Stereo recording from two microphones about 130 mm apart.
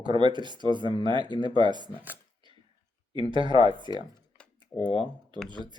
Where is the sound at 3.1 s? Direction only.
40° right (ahead or behind).